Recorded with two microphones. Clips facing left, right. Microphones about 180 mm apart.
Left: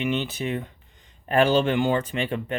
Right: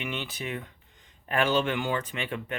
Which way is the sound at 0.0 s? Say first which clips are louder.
Left 8 dB; 25° left (ahead or behind).